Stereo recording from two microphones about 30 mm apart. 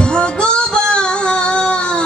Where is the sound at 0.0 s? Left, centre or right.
Left.